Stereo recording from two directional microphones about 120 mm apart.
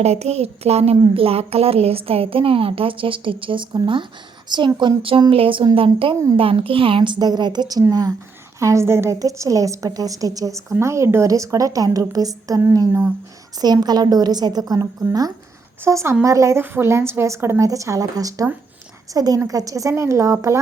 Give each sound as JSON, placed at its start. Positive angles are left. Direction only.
{"t": 0.0, "sound": "a woman's voice", "side_deg": -60}